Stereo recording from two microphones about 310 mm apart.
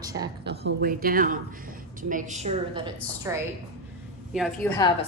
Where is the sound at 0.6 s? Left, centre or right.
Right.